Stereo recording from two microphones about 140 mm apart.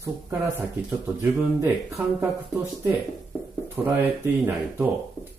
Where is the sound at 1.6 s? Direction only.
15° right (ahead or behind).